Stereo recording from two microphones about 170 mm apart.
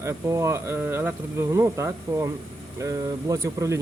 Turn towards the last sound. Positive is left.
turn(degrees=-20)  # may be behind; listen again after turning